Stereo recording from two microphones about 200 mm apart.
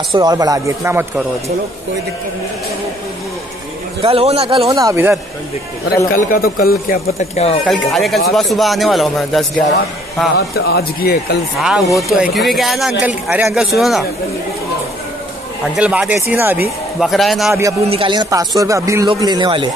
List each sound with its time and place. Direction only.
0.1 s speech: 20° right (ahead or behind)
4.0 s speech: 30° right (ahead or behind)
6.3 s speech: 50° left (ahead or behind)
7.2 s speech: 30° left (ahead or behind)
7.6 s speech: centre (ahead or behind)
10.3 s speech: 50° left (ahead or behind)
11.6 s speech: 5° right (ahead or behind)
15.7 s speech: 5° right (ahead or behind)
17.0 s speech: centre (ahead or behind)
17.8 s speech: 25° right (ahead or behind)